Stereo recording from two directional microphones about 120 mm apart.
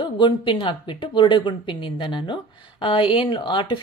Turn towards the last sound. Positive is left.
turn(degrees=45)  # may be behind; listen again after turning